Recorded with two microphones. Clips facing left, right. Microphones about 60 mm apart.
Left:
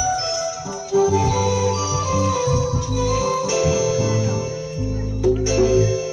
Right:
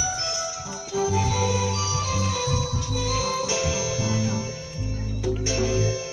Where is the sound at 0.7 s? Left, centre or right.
Centre.